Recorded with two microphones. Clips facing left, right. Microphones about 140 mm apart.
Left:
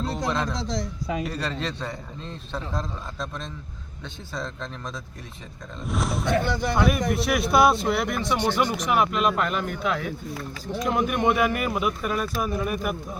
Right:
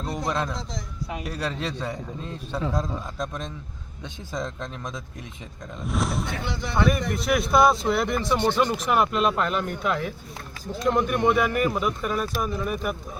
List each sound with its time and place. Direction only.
0.3 s a man's voice: 10° right (ahead or behind)
0.5 s a man's voice: 85° left
1.3 s a man's voice: 5° right (ahead or behind)
5.8 s speech: centre (ahead or behind)
6.4 s speech: 55° left (ahead or behind)
6.7 s speech: 5° left (ahead or behind)